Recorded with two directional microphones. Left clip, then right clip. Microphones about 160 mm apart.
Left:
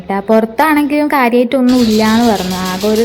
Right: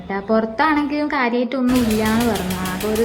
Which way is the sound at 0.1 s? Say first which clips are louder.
Left 8 dB; 30° left (ahead or behind).